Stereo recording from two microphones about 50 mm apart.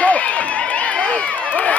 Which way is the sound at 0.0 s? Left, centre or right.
Left.